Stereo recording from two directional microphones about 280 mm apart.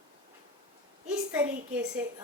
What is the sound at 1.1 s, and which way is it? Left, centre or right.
Speech, centre.